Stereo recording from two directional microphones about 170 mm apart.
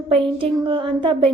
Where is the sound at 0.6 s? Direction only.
30° right (ahead or behind).